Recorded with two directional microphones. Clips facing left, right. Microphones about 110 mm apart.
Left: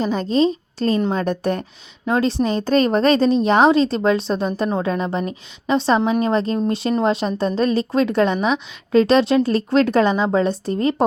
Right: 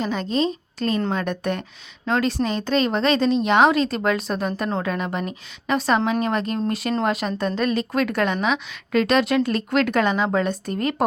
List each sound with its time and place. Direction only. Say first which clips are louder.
0.0 s a woman's voice: left 5 dB; 35° left (ahead or behind)